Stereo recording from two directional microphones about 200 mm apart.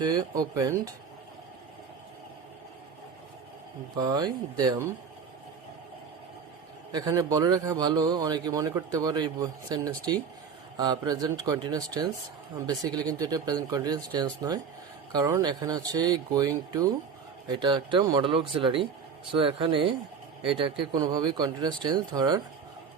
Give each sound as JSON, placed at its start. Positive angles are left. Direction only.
{"t": 0.0, "sound": "a man's voice", "side_deg": -20}
{"t": 3.9, "sound": "a man's voice", "side_deg": -20}
{"t": 6.9, "sound": "a man's voice", "side_deg": -20}